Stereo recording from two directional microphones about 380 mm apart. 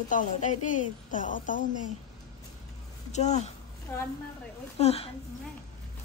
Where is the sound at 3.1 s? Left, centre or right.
Centre.